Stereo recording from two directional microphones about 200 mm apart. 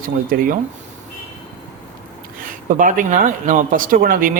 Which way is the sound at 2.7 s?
40° right (ahead or behind).